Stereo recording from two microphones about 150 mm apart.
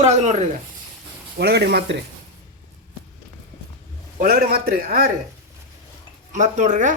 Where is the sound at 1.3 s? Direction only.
90° right.